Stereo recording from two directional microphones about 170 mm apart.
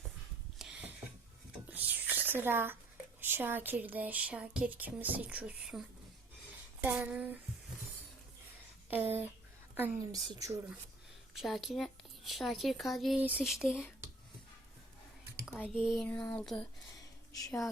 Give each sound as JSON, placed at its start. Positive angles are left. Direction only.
{"t": 0.6, "sound": "a sound", "side_deg": -5}
{"t": 1.7, "sound": "whispering", "side_deg": -10}
{"t": 3.2, "sound": "speech", "side_deg": -10}
{"t": 6.8, "sound": "speech", "side_deg": -10}
{"t": 8.9, "sound": "speech", "side_deg": -10}
{"t": 11.3, "sound": "speech", "side_deg": 0}
{"t": 15.4, "sound": "a sound", "side_deg": -5}
{"t": 15.8, "sound": "speech", "side_deg": -5}
{"t": 17.3, "sound": "speech", "side_deg": 20}